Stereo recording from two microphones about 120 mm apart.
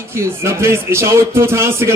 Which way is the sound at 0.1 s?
20° right (ahead or behind).